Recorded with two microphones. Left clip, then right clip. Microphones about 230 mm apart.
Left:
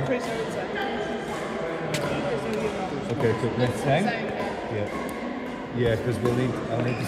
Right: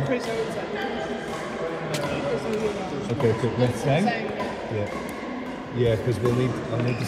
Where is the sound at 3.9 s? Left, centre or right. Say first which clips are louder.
Left 1 dB; left.